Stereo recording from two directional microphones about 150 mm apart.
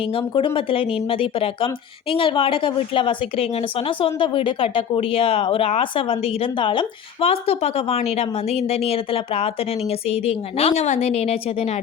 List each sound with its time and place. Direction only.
0.1 s a woman's voice: 35° left (ahead or behind)